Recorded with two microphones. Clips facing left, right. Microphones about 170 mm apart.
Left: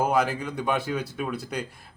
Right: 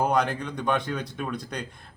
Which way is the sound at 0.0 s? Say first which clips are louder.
Even; 5° left (ahead or behind).